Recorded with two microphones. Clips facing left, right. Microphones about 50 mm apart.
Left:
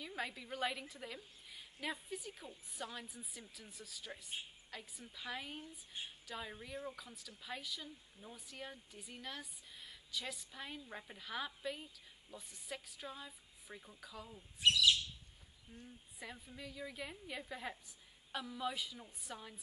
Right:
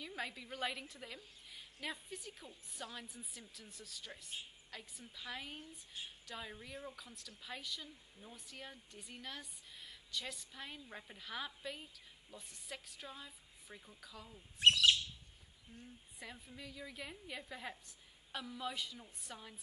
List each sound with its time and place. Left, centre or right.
0.0 s speech: centre
14.6 s bird: right
16.2 s speech: centre